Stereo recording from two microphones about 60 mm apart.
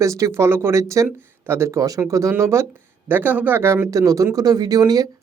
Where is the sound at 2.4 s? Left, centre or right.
Right.